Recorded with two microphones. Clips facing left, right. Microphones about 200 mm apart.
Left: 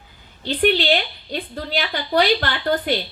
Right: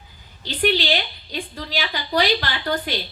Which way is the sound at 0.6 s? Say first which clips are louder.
Left 3 dB; 55° left (ahead or behind).